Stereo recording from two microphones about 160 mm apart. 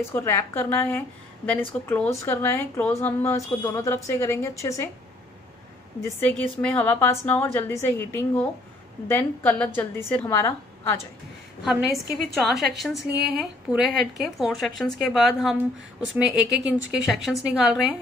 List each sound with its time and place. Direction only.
0.0 s a woman's voice: 15° left (ahead or behind)
5.9 s a woman's voice: 15° left (ahead or behind)
11.6 s a woman's voice: centre (ahead or behind)